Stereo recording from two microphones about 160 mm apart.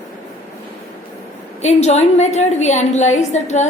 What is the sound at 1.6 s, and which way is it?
A woman's voice, 45° left (ahead or behind).